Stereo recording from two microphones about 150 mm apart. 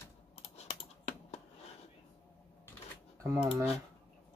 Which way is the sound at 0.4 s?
45° left (ahead or behind).